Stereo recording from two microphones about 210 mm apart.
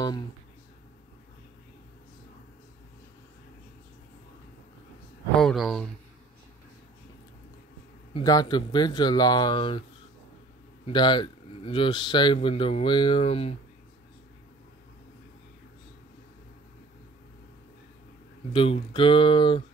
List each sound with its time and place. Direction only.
5.4 s speech: centre (ahead or behind)
8.1 s speech: 20° left (ahead or behind)
10.9 s speech: 20° left (ahead or behind)
18.5 s speech: 25° left (ahead or behind)